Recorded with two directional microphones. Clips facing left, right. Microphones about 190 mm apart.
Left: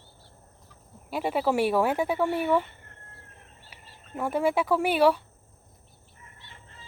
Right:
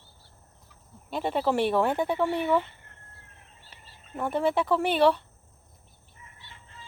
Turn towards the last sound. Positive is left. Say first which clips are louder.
# even
turn(degrees=10)  # may be behind; listen again after turning